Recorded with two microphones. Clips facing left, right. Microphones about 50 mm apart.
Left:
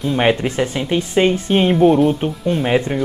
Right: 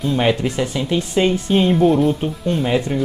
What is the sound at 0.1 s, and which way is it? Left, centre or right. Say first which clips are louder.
Speech: left 2 dB; left.